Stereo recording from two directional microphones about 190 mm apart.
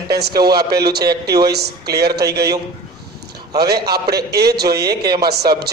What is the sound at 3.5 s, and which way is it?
A man's voice, 55° right (ahead or behind).